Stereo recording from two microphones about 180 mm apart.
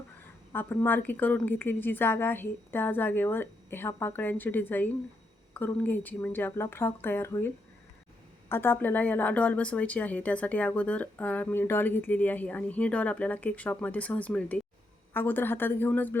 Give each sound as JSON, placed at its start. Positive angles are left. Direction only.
{"t": 0.5, "sound": "a woman's voice", "side_deg": 10}